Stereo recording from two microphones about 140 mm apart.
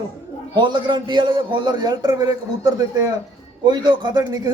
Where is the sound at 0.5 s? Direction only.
35° right (ahead or behind).